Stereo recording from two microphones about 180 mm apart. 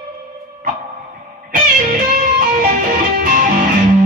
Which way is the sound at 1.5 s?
50° right (ahead or behind).